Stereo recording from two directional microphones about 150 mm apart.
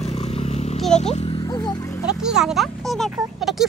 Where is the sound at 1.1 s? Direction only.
40° left (ahead or behind).